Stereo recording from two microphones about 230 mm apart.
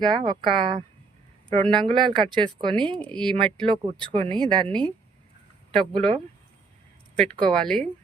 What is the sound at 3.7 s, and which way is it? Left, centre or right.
Speech, right.